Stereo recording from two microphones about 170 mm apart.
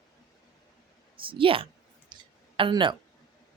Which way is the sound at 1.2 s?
30° right (ahead or behind).